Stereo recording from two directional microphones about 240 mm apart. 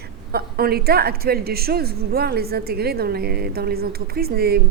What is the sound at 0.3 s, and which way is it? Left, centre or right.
A woman's voice, right.